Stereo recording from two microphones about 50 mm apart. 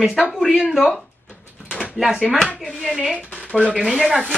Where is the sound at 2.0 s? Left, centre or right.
Centre.